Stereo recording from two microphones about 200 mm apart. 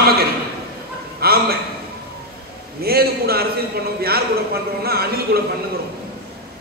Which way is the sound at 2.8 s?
50° right (ahead or behind).